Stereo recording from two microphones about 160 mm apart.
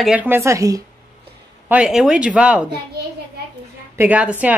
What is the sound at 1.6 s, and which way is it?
Speech, 5° right (ahead or behind).